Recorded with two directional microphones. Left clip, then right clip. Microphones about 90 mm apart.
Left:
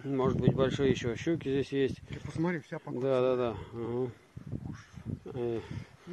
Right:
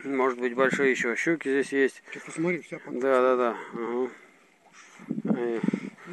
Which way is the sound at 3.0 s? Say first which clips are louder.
Right 6 dB; 15° left (ahead or behind).